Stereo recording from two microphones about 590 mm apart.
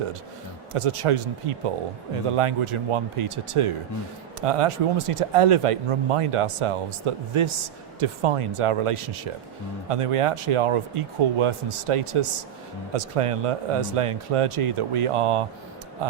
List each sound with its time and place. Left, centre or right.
0.7 s speech: right